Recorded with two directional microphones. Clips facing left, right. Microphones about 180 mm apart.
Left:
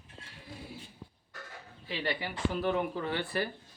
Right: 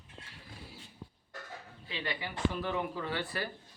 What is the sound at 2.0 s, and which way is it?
A man's voice, 30° left (ahead or behind).